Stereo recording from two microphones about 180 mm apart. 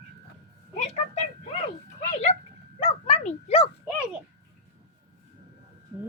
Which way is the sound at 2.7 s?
35° left (ahead or behind).